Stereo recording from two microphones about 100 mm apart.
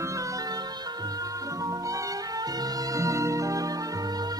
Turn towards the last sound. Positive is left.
turn(degrees=-40)  # may be behind; listen again after turning